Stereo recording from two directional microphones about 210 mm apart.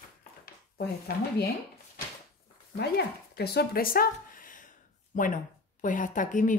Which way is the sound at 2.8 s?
50° left (ahead or behind).